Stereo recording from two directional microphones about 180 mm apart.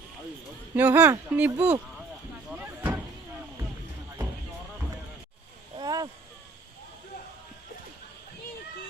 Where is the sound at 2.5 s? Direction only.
5° right (ahead or behind).